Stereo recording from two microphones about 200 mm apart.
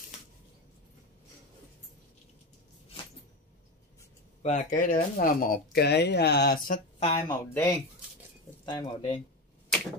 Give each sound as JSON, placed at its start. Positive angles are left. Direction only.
{"t": 4.4, "sound": "speech", "side_deg": 40}
{"t": 7.0, "sound": "speech", "side_deg": 20}